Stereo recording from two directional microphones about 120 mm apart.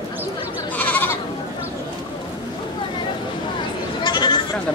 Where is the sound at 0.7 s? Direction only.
15° left (ahead or behind).